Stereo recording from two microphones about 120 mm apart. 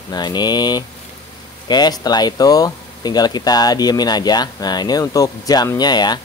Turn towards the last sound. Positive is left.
turn(degrees=35)  # may be behind; listen again after turning